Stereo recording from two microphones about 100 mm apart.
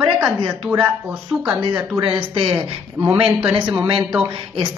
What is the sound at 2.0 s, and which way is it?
Speech, 60° right (ahead or behind).